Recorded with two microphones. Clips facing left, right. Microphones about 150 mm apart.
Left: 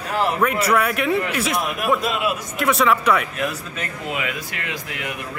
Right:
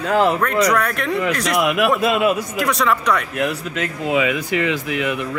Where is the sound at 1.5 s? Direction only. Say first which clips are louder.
Right 7 dB; 90° right.